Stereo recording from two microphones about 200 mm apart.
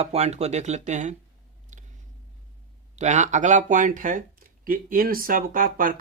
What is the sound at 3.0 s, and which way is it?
Speech, 35° right (ahead or behind).